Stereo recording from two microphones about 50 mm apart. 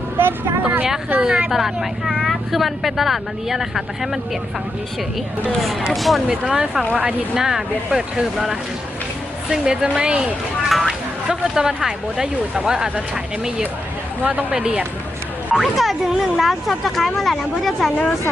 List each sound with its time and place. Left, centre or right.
0.2 s vehicle: right
0.6 s vehicle: right
1.2 s speech: centre
1.5 s speech: centre
5.9 s speech: centre
6.5 s speech: centre
10.7 s speech: centre
14.3 s speech: right
15.5 s speech: centre